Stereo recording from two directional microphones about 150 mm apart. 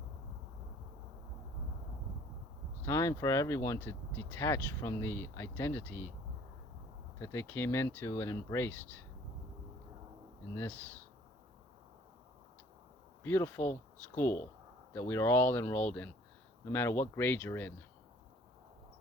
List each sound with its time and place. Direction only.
2.8 s speech: 20° left (ahead or behind)
7.2 s speech: 15° left (ahead or behind)
10.5 s speech: 10° left (ahead or behind)
13.2 s speech: 15° left (ahead or behind)